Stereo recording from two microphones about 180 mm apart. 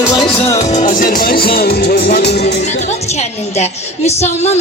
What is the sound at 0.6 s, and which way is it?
Music, 45° left (ahead or behind).